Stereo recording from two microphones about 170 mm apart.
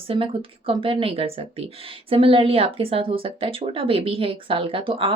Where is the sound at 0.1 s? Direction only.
30° right (ahead or behind).